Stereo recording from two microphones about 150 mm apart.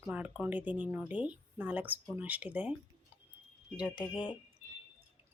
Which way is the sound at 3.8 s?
5° right (ahead or behind).